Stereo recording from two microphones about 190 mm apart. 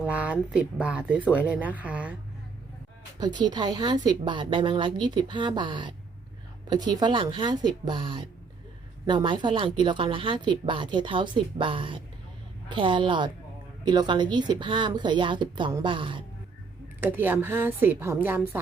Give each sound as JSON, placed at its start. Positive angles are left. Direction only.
{"t": 0.0, "sound": "speech", "side_deg": -5}
{"t": 3.2, "sound": "speech", "side_deg": -20}
{"t": 17.0, "sound": "speech", "side_deg": -10}